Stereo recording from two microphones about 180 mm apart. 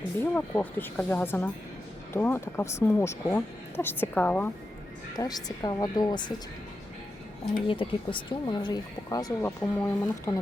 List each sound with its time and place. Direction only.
0.2 s speech: 10° left (ahead or behind)
5.1 s speech: 20° left (ahead or behind)
7.7 s speech: 30° left (ahead or behind)